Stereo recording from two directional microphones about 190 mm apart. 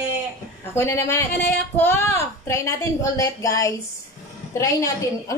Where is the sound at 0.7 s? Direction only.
15° left (ahead or behind).